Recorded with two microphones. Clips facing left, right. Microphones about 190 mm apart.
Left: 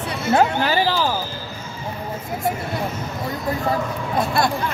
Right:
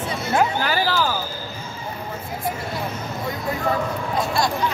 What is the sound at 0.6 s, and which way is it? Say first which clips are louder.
Speech: left 2 dB; 20° left (ahead or behind).